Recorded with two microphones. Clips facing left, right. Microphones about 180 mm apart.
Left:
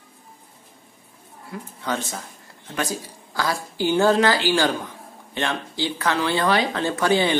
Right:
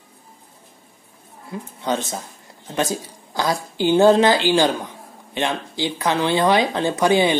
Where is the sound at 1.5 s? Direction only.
20° right (ahead or behind).